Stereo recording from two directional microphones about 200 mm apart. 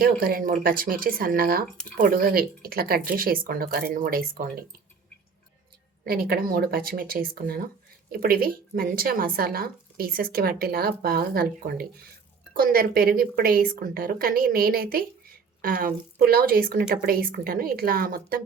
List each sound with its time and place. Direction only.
0.0 s a woman's voice: 45° right (ahead or behind)
6.1 s a woman's voice: 50° right (ahead or behind)